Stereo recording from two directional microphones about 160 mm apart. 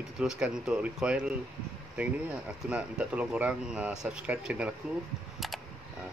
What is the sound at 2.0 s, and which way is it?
Chime, 10° right (ahead or behind).